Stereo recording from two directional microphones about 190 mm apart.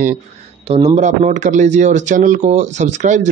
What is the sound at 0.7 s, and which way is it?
A man's voice, 30° right (ahead or behind).